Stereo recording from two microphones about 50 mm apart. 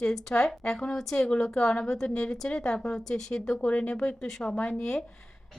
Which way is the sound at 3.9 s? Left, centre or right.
Centre.